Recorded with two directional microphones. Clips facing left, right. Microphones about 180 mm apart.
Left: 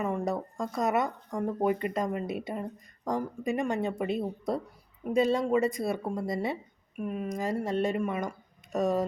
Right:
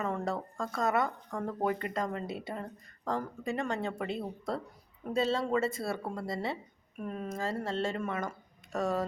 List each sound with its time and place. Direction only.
0.0 s speech: 15° left (ahead or behind)